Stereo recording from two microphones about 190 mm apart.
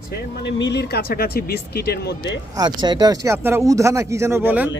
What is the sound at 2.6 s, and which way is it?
Speech, 20° right (ahead or behind).